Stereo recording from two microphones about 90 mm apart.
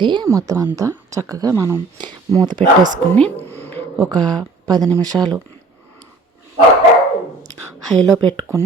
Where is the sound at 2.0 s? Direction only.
55° right (ahead or behind).